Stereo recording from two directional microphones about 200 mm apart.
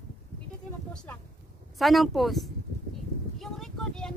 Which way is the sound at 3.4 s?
5° left (ahead or behind).